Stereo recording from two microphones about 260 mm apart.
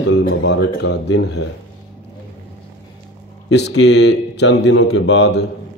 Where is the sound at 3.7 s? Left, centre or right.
Left.